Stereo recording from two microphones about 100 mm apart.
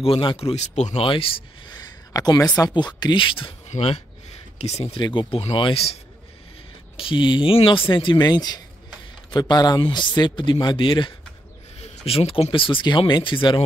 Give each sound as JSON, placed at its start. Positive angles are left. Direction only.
{"t": 0.0, "sound": "speech", "side_deg": 60}
{"t": 0.5, "sound": "speech", "side_deg": 70}
{"t": 1.8, "sound": "a sound", "side_deg": 40}
{"t": 2.7, "sound": "speech", "side_deg": 45}
{"t": 4.6, "sound": "speech", "side_deg": 90}
{"t": 4.9, "sound": "speech", "side_deg": 55}
{"t": 7.0, "sound": "speech", "side_deg": 55}
{"t": 11.8, "sound": "a sound", "side_deg": 90}
{"t": 12.4, "sound": "speech", "side_deg": 60}